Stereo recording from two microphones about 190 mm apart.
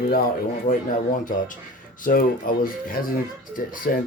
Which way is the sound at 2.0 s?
45° left (ahead or behind).